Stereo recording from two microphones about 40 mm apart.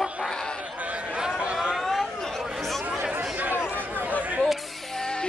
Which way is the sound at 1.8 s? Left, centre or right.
Centre.